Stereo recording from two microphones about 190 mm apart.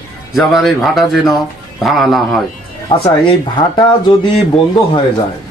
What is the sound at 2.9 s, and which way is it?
Speech, 30° left (ahead or behind).